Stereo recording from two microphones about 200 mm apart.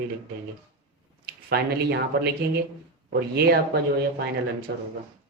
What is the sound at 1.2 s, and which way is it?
Speech, 50° right (ahead or behind).